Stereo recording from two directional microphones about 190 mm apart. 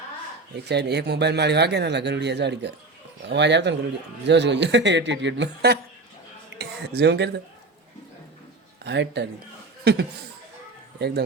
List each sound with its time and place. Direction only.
0.7 s speech: 60° right (ahead or behind)
8.8 s speech: 65° right (ahead or behind)
11.0 s speech: 60° right (ahead or behind)